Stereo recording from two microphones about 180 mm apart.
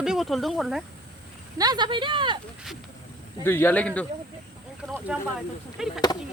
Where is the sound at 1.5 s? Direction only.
20° right (ahead or behind).